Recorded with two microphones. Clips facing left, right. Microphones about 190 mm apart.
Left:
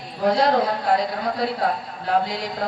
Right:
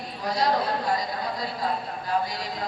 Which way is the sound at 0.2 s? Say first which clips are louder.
Left 7 dB; 65° left (ahead or behind).